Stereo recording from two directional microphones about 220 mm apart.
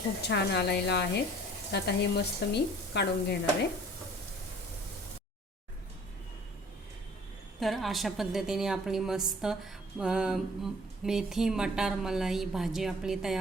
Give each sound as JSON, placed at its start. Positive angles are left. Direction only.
{"t": 0.2, "sound": "speech", "side_deg": 50}
{"t": 7.6, "sound": "a woman's voice", "side_deg": 0}